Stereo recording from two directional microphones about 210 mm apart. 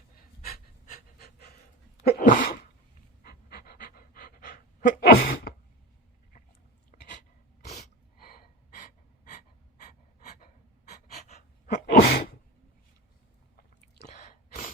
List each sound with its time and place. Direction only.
2.0 s sneeze: 45° left (ahead or behind)
3.2 s pant: 45° left (ahead or behind)
6.9 s a sound: 35° left (ahead or behind)
8.2 s gasp: 45° left (ahead or behind)
10.4 s sneeze: 35° left (ahead or behind)
14.1 s sneeze: 35° left (ahead or behind)